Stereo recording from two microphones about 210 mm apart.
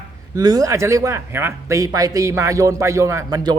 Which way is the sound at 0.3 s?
15° right (ahead or behind).